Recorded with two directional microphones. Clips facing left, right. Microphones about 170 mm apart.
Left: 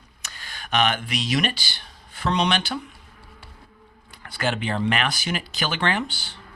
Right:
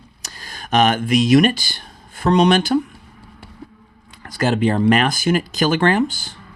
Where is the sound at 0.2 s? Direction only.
40° right (ahead or behind).